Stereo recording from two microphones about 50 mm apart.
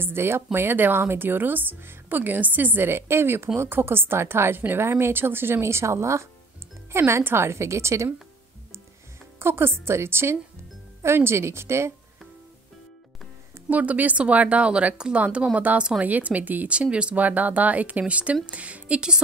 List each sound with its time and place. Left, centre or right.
0.0 s a woman's voice: right
2.9 s a woman's voice: right
6.9 s a woman's voice: right
9.4 s a woman's voice: right
13.7 s speech: right
15.5 s a woman's voice: right
16.7 s speech: right